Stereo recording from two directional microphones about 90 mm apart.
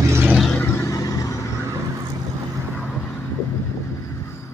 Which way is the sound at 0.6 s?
30° left (ahead or behind).